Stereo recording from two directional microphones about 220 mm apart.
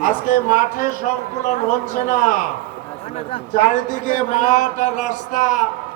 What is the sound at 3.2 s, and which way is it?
A man's voice, 25° left (ahead or behind).